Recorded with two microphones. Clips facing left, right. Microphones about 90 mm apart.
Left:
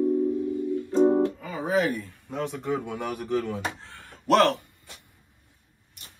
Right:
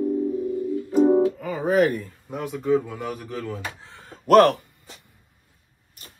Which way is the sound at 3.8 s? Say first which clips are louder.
Even; 20° right (ahead or behind).